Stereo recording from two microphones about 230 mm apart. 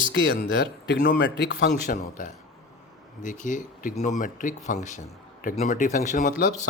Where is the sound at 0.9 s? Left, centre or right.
Left.